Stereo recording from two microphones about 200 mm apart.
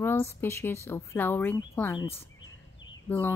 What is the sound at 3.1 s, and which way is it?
Speech, 10° left (ahead or behind).